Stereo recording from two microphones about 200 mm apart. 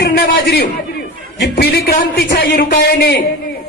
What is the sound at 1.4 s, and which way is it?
A man's voice, 55° left (ahead or behind).